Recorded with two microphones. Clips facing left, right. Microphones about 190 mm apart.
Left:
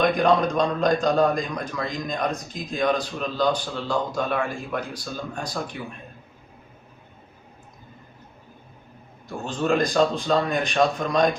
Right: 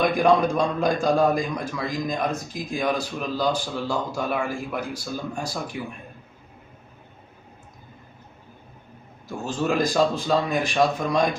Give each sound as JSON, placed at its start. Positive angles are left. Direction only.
{"t": 0.0, "sound": "a man's voice", "side_deg": -10}
{"t": 9.4, "sound": "a man's voice", "side_deg": -5}